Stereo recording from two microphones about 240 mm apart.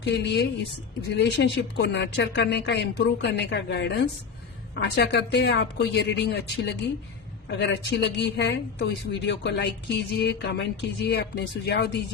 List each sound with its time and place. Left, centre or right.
0.0 s speech: left